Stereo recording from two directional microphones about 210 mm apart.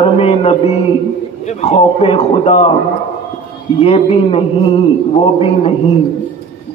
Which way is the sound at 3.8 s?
30° left (ahead or behind).